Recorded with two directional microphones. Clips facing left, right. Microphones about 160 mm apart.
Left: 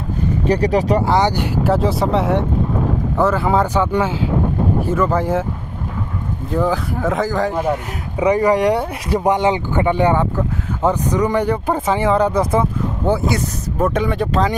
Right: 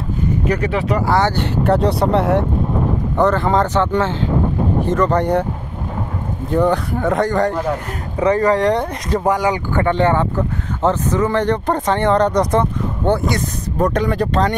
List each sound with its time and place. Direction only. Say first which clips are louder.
0.5 s speech: left 5 dB; 35° left (ahead or behind)
1.0 s speech: even; 15° left (ahead or behind)
6.5 s speech: right 3 dB; centre (ahead or behind); by 9.8 s 20° left (ahead or behind)
9.8 s speech: even; 10° left (ahead or behind)